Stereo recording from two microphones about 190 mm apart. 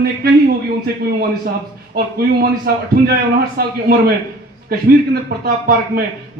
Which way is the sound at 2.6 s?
55° right (ahead or behind).